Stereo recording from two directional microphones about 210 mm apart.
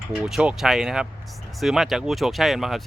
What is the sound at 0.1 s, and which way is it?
Speech, 5° right (ahead or behind).